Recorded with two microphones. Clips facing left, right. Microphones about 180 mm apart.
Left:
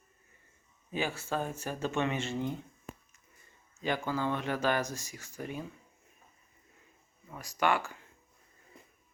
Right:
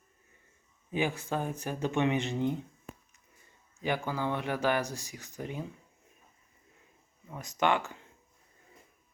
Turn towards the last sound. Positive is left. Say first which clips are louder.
# right 1 dB
turn(degrees=-20)  # may be behind; listen again after turning